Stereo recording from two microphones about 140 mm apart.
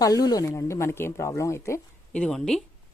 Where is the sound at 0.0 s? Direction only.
25° left (ahead or behind).